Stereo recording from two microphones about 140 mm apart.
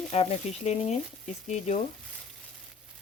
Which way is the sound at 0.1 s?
50° left (ahead or behind).